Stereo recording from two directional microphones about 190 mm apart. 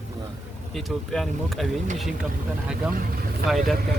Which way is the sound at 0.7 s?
Centre (ahead or behind).